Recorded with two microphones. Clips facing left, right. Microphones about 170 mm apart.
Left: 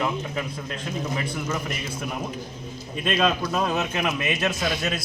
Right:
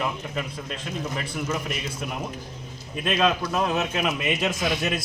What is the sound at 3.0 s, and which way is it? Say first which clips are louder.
A man's voice: even; centre (ahead or behind).